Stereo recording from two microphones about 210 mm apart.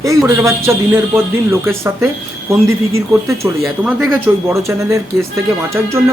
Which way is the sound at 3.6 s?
10° right (ahead or behind).